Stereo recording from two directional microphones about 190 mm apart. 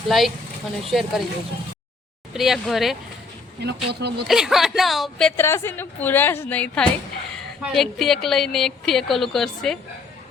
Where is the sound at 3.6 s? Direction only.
60° right (ahead or behind).